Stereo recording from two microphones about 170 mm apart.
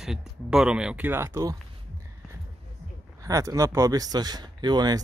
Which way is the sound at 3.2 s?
20° right (ahead or behind).